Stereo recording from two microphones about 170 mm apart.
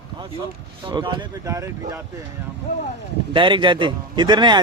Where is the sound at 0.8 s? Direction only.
30° right (ahead or behind).